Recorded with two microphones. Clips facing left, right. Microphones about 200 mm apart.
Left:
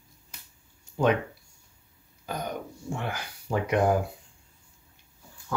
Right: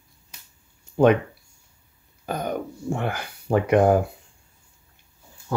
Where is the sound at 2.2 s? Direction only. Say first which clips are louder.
Right 6 dB; 55° right (ahead or behind).